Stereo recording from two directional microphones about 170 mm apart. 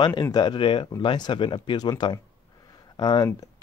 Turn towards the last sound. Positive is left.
turn(degrees=25)  # may be behind; listen again after turning